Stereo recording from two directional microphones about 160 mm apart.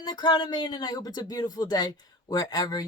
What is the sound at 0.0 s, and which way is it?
Speech, 25° left (ahead or behind).